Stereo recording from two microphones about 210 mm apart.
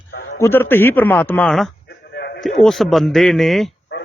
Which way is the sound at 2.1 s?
50° left (ahead or behind).